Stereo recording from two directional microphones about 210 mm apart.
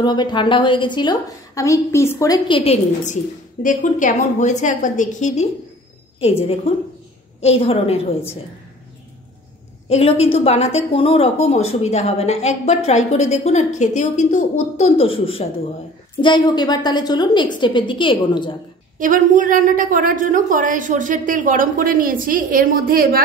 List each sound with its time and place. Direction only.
0.0 s a woman's voice: 20° left (ahead or behind)
9.8 s a woman's voice: 30° left (ahead or behind)
18.9 s a woman's voice: 40° right (ahead or behind)